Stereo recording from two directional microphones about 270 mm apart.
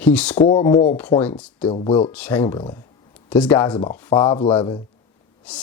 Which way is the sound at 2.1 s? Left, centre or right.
Centre.